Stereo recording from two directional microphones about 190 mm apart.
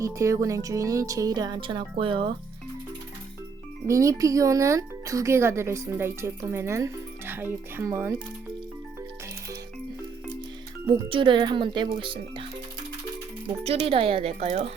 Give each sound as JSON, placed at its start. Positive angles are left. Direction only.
{"t": 0.0, "sound": "speech", "side_deg": -15}
{"t": 3.8, "sound": "speech", "side_deg": -15}
{"t": 10.8, "sound": "speech", "side_deg": -25}
{"t": 13.7, "sound": "speech", "side_deg": -30}